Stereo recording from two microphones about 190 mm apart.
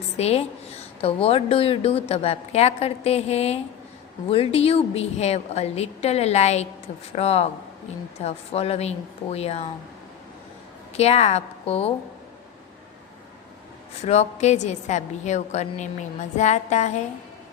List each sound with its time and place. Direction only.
0.2 s a woman's voice: 35° left (ahead or behind)
10.9 s a woman's voice: 35° left (ahead or behind)
14.0 s a woman's voice: 35° left (ahead or behind)